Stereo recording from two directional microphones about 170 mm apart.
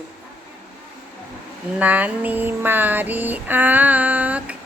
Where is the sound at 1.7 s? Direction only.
10° right (ahead or behind).